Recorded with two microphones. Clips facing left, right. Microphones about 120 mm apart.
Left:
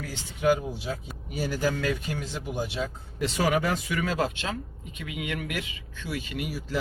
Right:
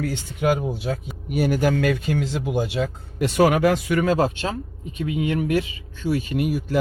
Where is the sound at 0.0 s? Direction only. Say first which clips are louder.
Right 3 dB; 65° right (ahead or behind).